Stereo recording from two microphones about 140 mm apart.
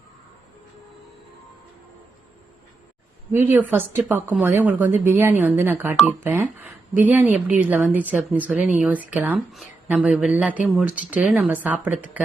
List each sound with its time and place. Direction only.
3.3 s a woman's voice: 20° right (ahead or behind)